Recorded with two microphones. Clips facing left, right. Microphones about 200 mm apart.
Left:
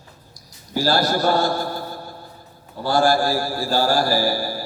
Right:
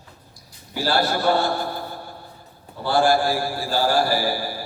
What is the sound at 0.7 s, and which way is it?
Speech, 40° left (ahead or behind).